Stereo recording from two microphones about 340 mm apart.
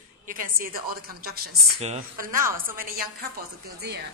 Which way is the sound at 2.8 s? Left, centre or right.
Right.